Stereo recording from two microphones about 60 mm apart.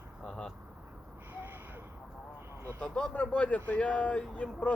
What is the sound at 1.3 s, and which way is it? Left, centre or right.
Gasp, right.